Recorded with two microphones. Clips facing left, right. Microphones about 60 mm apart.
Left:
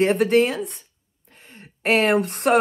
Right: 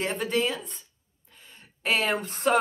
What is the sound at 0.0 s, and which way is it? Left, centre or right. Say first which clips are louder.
Speech: left 10 dB; left.